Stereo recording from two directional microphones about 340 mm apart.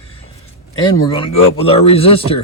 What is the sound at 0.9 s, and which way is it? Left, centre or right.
Speech, centre.